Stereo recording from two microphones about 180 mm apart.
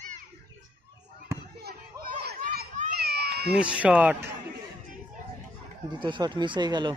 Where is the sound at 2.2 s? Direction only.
60° right (ahead or behind).